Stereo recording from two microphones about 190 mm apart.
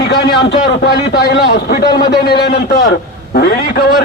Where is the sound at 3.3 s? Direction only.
50° left (ahead or behind).